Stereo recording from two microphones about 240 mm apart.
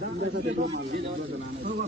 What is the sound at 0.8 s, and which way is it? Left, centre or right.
Speech, right.